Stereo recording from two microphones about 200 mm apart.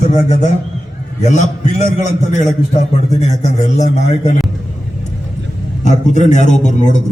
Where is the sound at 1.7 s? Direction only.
35° left (ahead or behind).